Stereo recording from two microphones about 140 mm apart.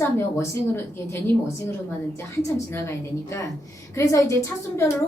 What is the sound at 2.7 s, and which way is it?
A woman's voice, 20° left (ahead or behind).